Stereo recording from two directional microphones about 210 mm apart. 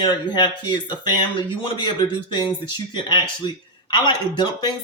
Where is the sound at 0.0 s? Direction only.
20° left (ahead or behind).